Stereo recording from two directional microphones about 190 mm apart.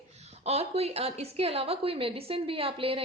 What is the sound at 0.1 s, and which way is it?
A woman's voice, 35° right (ahead or behind).